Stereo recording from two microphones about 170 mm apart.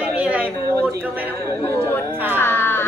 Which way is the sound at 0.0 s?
10° right (ahead or behind).